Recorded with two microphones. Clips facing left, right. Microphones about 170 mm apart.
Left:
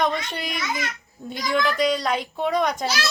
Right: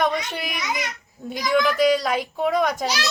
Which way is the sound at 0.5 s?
15° right (ahead or behind).